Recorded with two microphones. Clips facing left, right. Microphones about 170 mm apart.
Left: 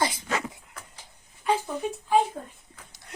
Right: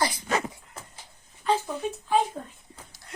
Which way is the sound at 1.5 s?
10° left (ahead or behind).